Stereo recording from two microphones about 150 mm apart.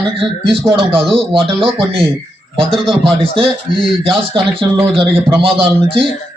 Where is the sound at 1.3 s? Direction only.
35° right (ahead or behind).